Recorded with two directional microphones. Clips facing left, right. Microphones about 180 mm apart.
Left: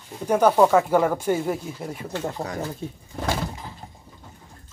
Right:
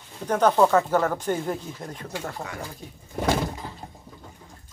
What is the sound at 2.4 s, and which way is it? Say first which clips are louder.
Speech: left 5 dB; 35° left (ahead or behind).